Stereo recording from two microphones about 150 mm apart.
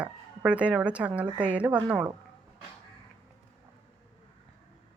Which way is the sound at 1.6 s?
10° right (ahead or behind).